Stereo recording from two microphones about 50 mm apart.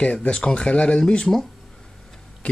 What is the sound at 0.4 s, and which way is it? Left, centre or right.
Speech, centre.